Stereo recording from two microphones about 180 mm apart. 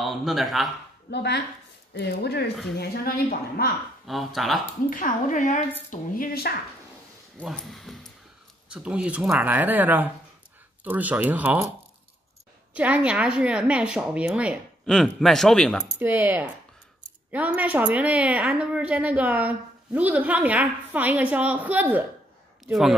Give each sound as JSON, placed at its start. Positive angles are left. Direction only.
{"t": 0.0, "sound": "speech", "side_deg": 0}
{"t": 1.1, "sound": "a woman's voice", "side_deg": 70}
{"t": 4.1, "sound": "speech", "side_deg": 0}
{"t": 4.8, "sound": "speech", "side_deg": 50}
{"t": 7.3, "sound": "a woman's voice", "side_deg": 0}
{"t": 12.7, "sound": "a woman's voice", "side_deg": -5}
{"t": 16.0, "sound": "a woman's voice", "side_deg": -10}